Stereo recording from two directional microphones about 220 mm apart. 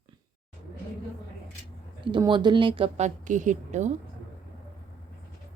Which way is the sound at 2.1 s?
20° right (ahead or behind).